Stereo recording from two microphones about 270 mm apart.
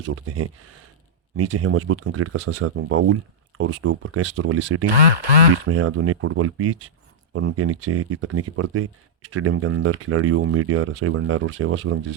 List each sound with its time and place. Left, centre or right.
0.0 s speech: right